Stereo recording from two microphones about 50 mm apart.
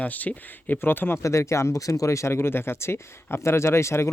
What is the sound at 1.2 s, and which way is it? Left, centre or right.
Speech, left.